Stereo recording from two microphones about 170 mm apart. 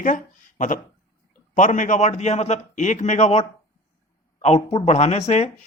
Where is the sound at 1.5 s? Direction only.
50° left (ahead or behind).